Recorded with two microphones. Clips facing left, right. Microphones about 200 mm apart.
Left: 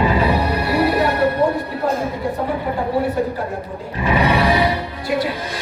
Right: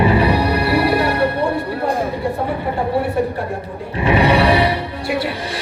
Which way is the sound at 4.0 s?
65° right (ahead or behind).